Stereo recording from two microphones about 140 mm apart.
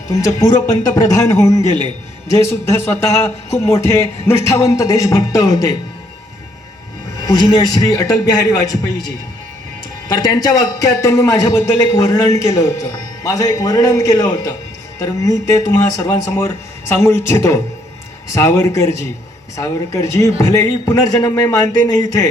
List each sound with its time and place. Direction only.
0.2 s a man's voice: 25° left (ahead or behind)
7.3 s a man's voice: 30° left (ahead or behind)
10.1 s a man's voice: 30° left (ahead or behind)